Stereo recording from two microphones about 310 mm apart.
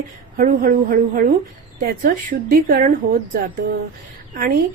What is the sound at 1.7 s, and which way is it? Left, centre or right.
A woman's voice, right.